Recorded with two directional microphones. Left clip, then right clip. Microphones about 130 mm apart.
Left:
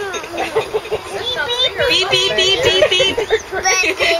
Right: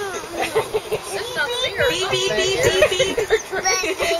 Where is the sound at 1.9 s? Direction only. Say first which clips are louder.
Left 6 dB; centre (ahead or behind).